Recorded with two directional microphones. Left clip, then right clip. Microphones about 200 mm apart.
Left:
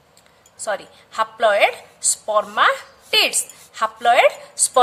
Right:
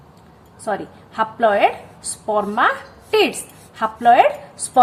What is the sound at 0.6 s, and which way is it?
A woman's voice, 40° left (ahead or behind).